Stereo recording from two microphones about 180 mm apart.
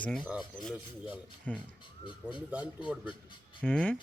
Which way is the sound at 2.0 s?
25° left (ahead or behind).